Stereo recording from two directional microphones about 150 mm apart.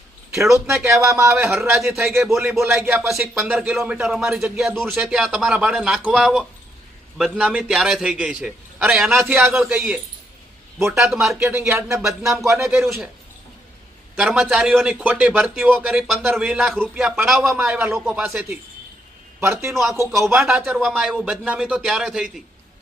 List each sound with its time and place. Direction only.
0.7 s a man's voice: centre (ahead or behind)
1.0 s a man's voice: 20° right (ahead or behind)
1.8 s a man's voice: centre (ahead or behind)
2.6 s a man's voice: 15° right (ahead or behind)
11.1 s a man's voice: centre (ahead or behind)
11.4 s a man's voice: 15° right (ahead or behind)
11.9 s a man's voice: centre (ahead or behind)
14.2 s a man's voice: 5° right (ahead or behind)
19.4 s a man's voice: 20° right (ahead or behind)
20.2 s a man's voice: 5° right (ahead or behind)